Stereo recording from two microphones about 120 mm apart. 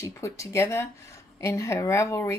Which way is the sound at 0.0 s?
25° left (ahead or behind).